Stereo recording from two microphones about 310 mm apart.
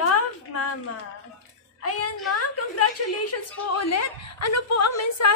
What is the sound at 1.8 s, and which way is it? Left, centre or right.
A woman's voice, left.